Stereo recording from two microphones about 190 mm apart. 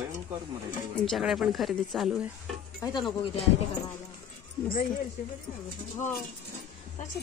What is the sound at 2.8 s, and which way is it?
Speech, 20° left (ahead or behind).